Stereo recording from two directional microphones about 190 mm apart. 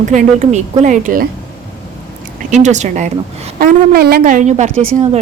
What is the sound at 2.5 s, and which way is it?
Speech, 40° right (ahead or behind).